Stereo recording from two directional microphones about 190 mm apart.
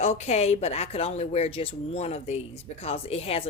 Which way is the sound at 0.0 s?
35° left (ahead or behind).